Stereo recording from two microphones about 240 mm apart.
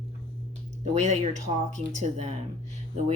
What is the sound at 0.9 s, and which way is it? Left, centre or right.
Speech, right.